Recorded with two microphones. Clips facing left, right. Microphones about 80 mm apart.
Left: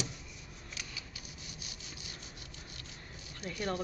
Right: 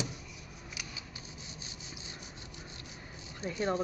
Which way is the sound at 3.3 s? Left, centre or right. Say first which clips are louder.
Right 4 dB; right.